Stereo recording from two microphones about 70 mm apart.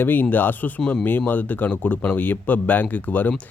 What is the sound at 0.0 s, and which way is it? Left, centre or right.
Speech, left.